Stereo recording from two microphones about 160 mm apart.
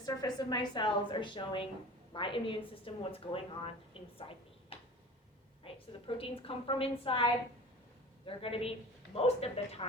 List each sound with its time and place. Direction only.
0.0 s a woman's voice: 25° left (ahead or behind); by 9.8 s 40° left (ahead or behind)